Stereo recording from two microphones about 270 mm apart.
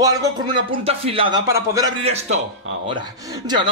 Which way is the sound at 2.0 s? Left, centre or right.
Right.